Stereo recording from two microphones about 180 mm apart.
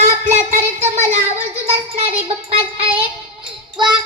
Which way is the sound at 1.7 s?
35° right (ahead or behind).